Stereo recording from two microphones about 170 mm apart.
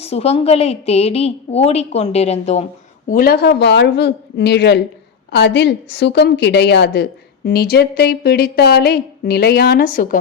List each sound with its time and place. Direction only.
0.0 s a woman's voice: 35° left (ahead or behind)
3.1 s a woman's voice: 60° left (ahead or behind)